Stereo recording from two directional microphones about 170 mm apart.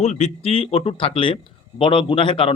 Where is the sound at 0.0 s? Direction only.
40° left (ahead or behind).